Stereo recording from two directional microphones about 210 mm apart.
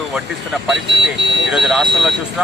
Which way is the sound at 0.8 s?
60° right (ahead or behind).